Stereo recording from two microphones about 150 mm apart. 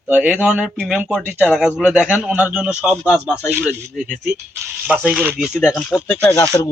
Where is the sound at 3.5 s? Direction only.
10° right (ahead or behind).